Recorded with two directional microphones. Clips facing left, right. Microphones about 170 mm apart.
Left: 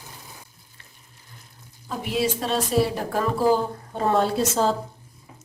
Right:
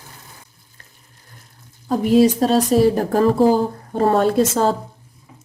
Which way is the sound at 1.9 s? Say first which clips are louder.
Right 11 dB; 40° right (ahead or behind).